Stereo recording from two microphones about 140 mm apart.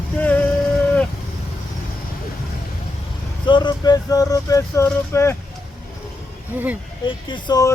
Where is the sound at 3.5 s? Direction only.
30° left (ahead or behind).